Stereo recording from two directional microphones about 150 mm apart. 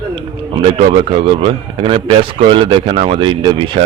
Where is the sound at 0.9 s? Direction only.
40° right (ahead or behind).